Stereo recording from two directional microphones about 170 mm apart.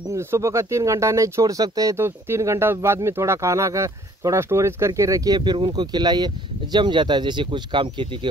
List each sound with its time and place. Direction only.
0.1 s speech: 15° right (ahead or behind)